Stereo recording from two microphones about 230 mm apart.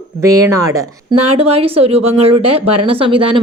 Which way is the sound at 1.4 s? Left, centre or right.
Right.